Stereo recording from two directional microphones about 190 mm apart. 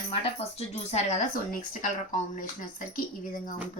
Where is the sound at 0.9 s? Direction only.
40° left (ahead or behind).